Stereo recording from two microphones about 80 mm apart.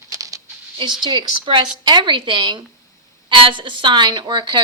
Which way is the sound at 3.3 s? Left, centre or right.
Right.